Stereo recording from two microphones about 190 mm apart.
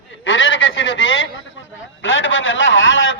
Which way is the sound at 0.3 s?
90° left.